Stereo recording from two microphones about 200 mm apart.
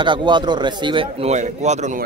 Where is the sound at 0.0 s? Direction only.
25° right (ahead or behind).